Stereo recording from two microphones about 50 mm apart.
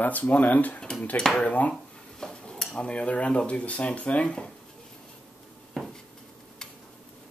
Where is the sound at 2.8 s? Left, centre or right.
Left.